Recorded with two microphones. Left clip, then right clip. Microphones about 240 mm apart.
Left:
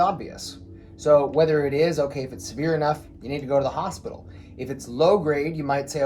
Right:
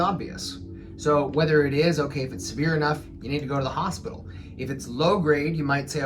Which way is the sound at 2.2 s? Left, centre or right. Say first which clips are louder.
Even; centre.